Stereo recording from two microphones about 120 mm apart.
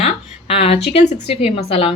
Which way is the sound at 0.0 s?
55° left (ahead or behind).